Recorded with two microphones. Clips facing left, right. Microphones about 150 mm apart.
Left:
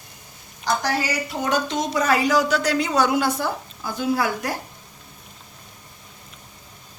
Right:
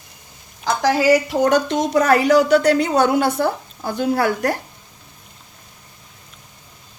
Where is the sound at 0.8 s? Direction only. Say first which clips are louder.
Right 10 dB; 90° right; by 4.5 s 55° right (ahead or behind).